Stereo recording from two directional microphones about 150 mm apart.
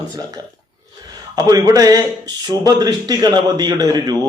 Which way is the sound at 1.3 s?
25° right (ahead or behind).